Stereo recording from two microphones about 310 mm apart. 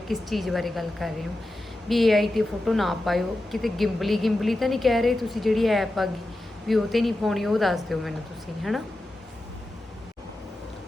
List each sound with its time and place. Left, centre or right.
0.1 s a woman's voice: centre